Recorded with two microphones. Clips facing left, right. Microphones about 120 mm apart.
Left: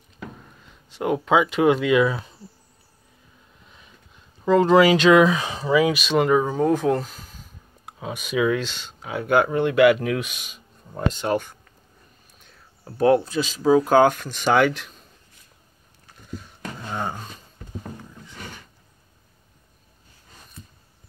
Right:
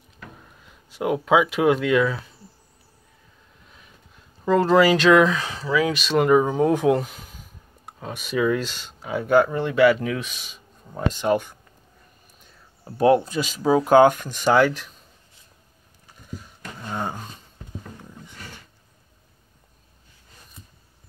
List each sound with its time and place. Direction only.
0.8 s speech: 5° right (ahead or behind)
2.0 s speech: 20° left (ahead or behind)
4.5 s speech: centre (ahead or behind); by 5.9 s 15° left (ahead or behind)
5.9 s speech: centre (ahead or behind)
8.0 s speech: centre (ahead or behind)
11.0 s speech: 5° right (ahead or behind)
12.8 s speech: 10° right (ahead or behind)
16.9 s speech: 10° left (ahead or behind)